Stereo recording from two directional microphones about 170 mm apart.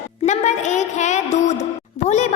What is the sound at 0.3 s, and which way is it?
Music, 45° left (ahead or behind).